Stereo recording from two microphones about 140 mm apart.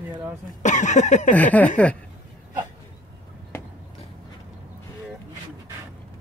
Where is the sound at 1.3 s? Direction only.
10° left (ahead or behind).